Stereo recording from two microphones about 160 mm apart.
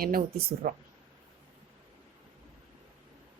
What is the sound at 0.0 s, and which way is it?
Speech, 70° right (ahead or behind).